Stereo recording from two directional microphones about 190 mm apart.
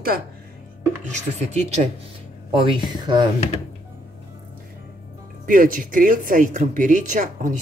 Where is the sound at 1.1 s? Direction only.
35° right (ahead or behind).